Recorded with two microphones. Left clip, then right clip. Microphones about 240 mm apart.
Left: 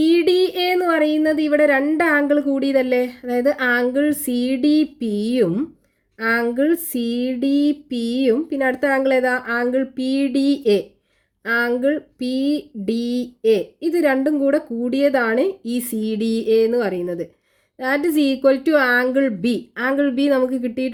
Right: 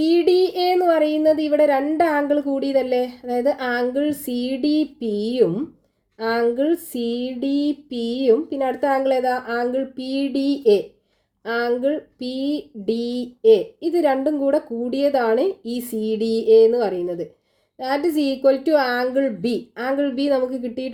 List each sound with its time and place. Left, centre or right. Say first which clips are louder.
0.1 s a woman's voice: left 1 dB; left